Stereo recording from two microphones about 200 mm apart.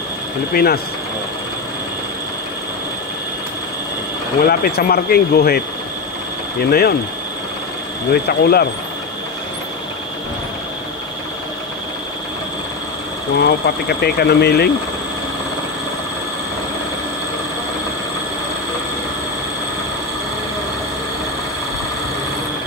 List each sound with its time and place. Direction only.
0.5 s speech: 50° left (ahead or behind)
4.4 s speech: 50° left (ahead or behind)
6.7 s speech: 50° left (ahead or behind)
8.1 s speech: 50° left (ahead or behind)
13.4 s speech: 50° left (ahead or behind)